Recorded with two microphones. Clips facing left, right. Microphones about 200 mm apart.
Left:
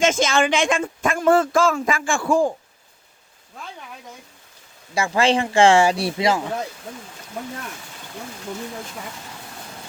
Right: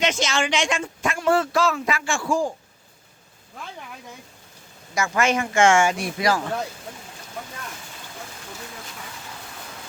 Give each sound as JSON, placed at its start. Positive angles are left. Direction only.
{"t": 0.0, "sound": "speech", "side_deg": 50}
{"t": 4.9, "sound": "speech", "side_deg": 30}